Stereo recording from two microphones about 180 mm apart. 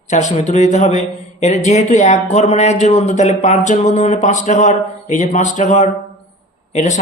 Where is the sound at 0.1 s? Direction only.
40° left (ahead or behind).